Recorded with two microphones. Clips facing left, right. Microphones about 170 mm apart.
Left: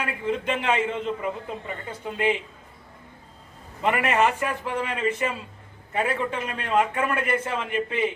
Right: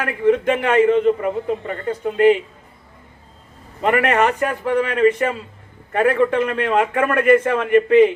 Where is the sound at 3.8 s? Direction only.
60° right (ahead or behind).